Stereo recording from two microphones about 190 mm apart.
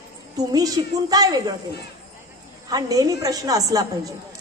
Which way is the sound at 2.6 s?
20° right (ahead or behind).